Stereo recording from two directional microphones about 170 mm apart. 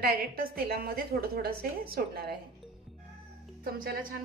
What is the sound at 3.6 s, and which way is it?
Speech, 60° right (ahead or behind).